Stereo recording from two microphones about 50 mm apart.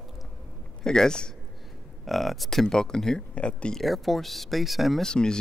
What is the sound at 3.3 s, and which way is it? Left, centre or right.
Speech, left.